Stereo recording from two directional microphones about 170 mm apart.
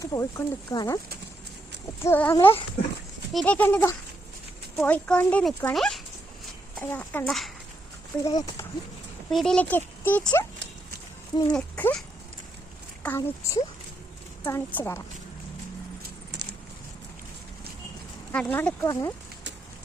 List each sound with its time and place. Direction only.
0.0 s speech: 20° left (ahead or behind)
2.0 s a child's voice: 10° left (ahead or behind)
8.2 s speech: 25° left (ahead or behind)
9.3 s speech: centre (ahead or behind)
11.5 s speech: 5° left (ahead or behind)
16.3 s a sound: 90° right
18.3 s speech: 10° left (ahead or behind)